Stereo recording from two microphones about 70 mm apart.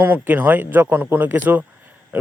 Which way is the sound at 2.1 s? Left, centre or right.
Right.